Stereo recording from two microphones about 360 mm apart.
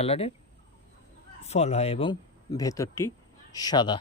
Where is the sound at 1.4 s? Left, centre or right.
Centre.